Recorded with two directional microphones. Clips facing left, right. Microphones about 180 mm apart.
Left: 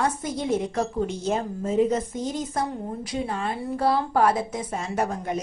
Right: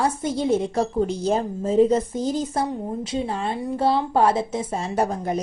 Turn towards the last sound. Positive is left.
turn(degrees=-35)  # may be behind; listen again after turning